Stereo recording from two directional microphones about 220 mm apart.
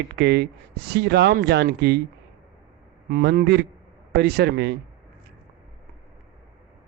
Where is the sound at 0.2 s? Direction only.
50° right (ahead or behind).